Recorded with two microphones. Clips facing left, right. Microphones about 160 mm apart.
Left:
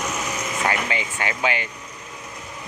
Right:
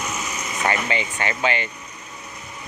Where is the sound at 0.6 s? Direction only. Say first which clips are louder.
Right 3 dB; 5° left (ahead or behind).